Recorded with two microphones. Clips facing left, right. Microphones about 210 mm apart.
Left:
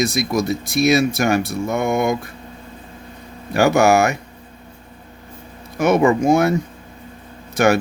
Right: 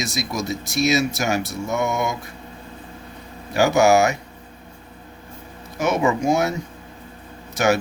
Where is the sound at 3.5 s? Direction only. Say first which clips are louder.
Left 2 dB; 60° left (ahead or behind).